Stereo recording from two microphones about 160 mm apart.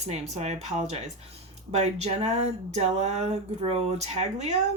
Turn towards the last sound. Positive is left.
turn(degrees=-45)  # may be behind; listen again after turning